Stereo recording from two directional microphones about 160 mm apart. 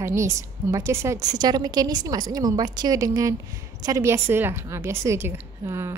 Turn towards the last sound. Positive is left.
turn(degrees=-15)  # may be behind; listen again after turning